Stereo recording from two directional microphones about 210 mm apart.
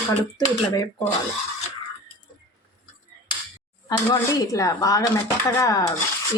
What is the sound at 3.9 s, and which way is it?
Speech, 15° left (ahead or behind).